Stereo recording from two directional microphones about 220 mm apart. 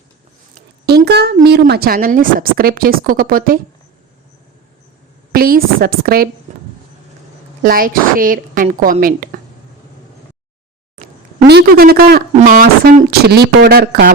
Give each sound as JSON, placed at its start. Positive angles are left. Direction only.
{"t": 0.9, "sound": "a woman's voice", "side_deg": -45}
{"t": 5.3, "sound": "speech", "side_deg": -40}
{"t": 6.5, "sound": "a sound", "side_deg": -30}
{"t": 7.6, "sound": "a woman's voice", "side_deg": -40}
{"t": 11.4, "sound": "speech", "side_deg": -45}